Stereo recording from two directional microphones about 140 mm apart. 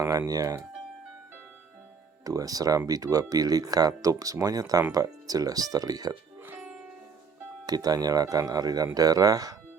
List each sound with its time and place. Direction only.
0.0 s speech: 25° right (ahead or behind)
2.2 s speech: 25° right (ahead or behind)
6.4 s music: 15° right (ahead or behind)
7.7 s speech: 30° right (ahead or behind)